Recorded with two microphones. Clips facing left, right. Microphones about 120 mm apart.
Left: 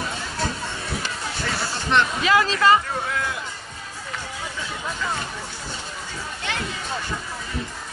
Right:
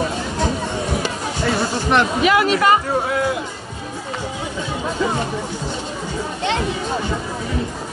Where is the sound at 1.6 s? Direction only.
15° right (ahead or behind).